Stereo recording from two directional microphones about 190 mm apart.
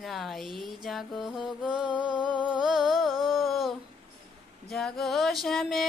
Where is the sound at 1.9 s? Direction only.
25° left (ahead or behind).